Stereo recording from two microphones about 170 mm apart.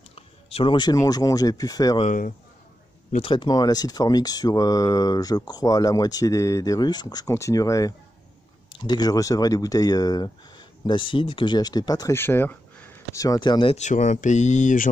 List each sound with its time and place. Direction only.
0.1 s speech: 35° left (ahead or behind)
2.0 s a man's voice: 50° left (ahead or behind)
3.1 s speech: 30° left (ahead or behind)